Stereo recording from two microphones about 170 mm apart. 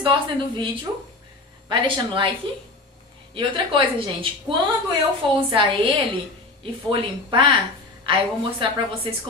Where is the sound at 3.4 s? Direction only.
30° right (ahead or behind).